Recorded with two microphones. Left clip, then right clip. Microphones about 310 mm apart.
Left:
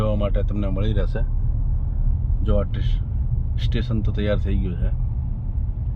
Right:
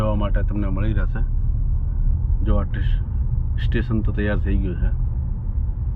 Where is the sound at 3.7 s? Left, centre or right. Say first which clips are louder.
Right 3 dB; centre.